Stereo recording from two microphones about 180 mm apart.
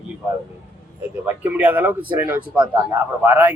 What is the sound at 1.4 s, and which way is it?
A man's voice, 10° right (ahead or behind).